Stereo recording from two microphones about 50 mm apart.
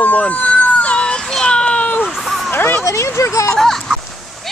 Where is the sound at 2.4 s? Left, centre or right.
Left.